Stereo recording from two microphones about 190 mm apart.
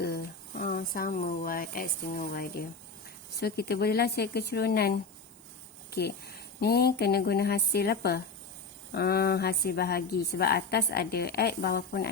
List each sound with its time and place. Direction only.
0.0 s a woman's voice: 50° left (ahead or behind)